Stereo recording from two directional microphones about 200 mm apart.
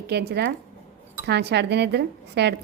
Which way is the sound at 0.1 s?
55° right (ahead or behind).